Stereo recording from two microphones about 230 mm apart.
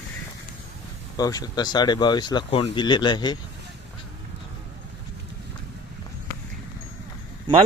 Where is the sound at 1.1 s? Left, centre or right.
Centre.